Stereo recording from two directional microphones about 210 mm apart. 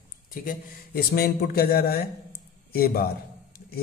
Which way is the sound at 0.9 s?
45° left (ahead or behind).